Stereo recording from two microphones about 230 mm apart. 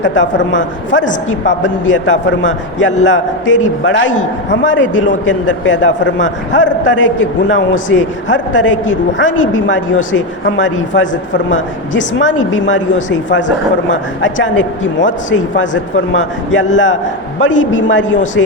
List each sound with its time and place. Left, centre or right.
0.0 s a man's voice: left